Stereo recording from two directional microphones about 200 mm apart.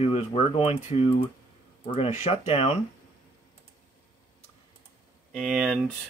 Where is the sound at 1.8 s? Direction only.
30° left (ahead or behind).